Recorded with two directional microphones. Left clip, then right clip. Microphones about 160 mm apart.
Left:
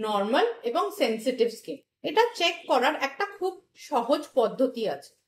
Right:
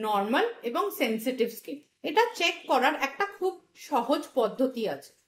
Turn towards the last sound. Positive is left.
turn(degrees=-40)  # may be behind; listen again after turning